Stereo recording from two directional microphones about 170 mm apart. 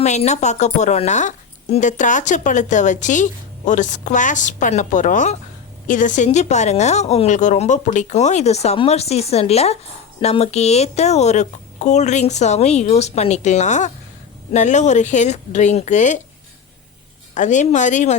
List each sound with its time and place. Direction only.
0.0 s a woman's voice: 40° left (ahead or behind)
17.3 s a woman's voice: 45° left (ahead or behind)